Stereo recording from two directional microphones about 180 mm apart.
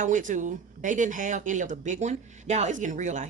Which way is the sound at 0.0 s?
45° right (ahead or behind).